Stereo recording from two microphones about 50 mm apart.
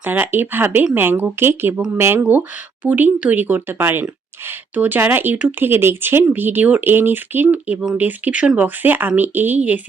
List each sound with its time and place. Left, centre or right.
0.0 s speech: right
2.8 s speech: right
4.7 s speech: right
6.8 s speech: right